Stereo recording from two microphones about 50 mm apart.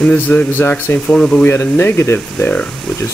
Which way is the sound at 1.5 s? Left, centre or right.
Left.